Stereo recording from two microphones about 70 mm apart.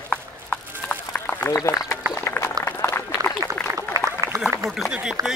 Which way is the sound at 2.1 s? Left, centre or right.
Left.